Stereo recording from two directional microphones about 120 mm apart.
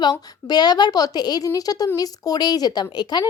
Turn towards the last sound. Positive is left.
turn(degrees=35)  # may be behind; listen again after turning